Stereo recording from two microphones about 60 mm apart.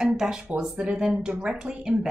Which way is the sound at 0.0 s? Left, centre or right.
Centre.